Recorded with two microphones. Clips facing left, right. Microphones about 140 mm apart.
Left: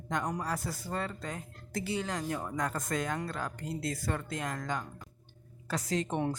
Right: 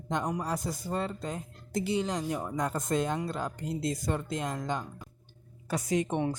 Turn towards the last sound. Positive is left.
turn(degrees=-15)  # may be behind; listen again after turning